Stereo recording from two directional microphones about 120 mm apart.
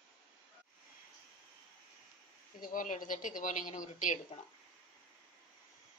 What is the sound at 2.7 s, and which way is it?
A woman's voice, 90° left.